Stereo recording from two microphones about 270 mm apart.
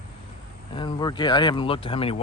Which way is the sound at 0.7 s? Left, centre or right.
Centre.